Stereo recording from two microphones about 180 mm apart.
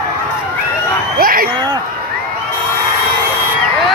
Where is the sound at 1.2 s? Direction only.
55° right (ahead or behind).